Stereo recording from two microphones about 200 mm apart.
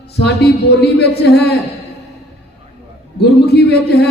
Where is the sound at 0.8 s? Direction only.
55° left (ahead or behind).